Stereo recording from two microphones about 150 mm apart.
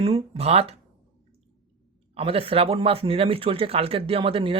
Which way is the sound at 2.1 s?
40° right (ahead or behind).